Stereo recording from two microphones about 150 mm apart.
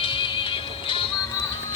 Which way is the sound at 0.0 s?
35° left (ahead or behind).